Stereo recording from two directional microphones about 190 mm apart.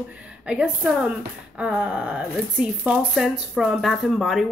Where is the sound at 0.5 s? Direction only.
5° right (ahead or behind).